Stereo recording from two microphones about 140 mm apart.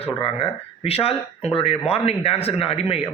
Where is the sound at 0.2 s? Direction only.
40° left (ahead or behind).